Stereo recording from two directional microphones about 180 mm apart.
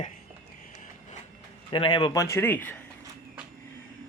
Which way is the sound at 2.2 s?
10° left (ahead or behind).